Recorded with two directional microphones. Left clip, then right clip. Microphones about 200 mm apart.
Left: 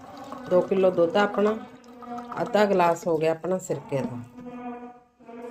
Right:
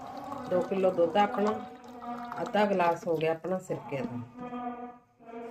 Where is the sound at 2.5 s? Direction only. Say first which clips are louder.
Left 5 dB; 30° left (ahead or behind).